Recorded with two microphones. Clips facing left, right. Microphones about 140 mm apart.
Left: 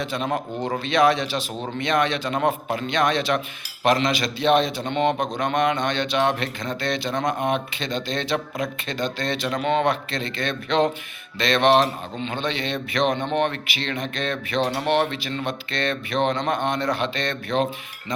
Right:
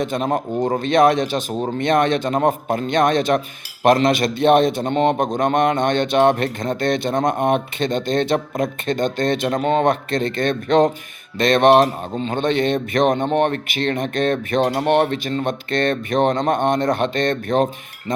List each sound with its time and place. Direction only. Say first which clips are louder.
0.0 s a man's voice: right 5 dB; 50° right (ahead or behind)